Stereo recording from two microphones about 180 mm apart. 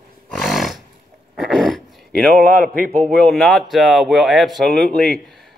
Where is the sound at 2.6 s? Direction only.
50° right (ahead or behind).